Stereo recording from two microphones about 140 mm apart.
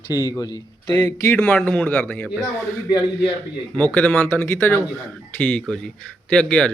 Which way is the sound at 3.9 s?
10° left (ahead or behind).